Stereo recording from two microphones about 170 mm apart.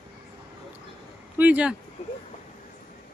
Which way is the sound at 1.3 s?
10° right (ahead or behind).